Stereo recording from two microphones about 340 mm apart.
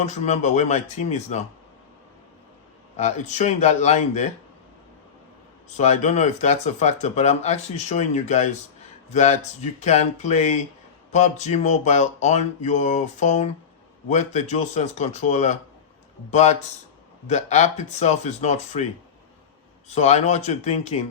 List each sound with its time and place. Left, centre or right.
0.0 s speech: centre
2.9 s speech: centre
5.6 s speech: centre
19.9 s speech: centre